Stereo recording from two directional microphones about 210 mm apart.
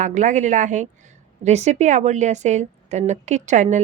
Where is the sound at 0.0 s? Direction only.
35° right (ahead or behind).